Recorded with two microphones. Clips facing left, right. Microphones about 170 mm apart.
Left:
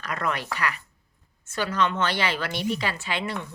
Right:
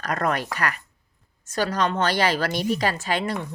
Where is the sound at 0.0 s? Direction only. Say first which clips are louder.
Right 4 dB; 40° right (ahead or behind).